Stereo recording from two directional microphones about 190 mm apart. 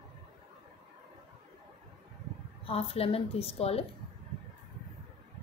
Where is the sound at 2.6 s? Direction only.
30° left (ahead or behind).